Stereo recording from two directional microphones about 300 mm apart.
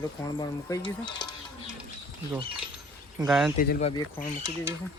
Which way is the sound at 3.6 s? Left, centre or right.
Left.